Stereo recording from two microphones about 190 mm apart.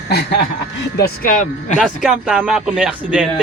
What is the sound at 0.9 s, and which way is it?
Speech, 50° left (ahead or behind).